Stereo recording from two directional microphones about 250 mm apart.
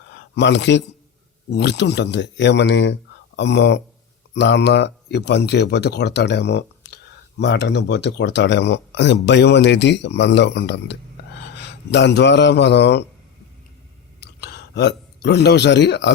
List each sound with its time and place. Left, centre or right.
0.1 s speech: left
14.2 s speech: left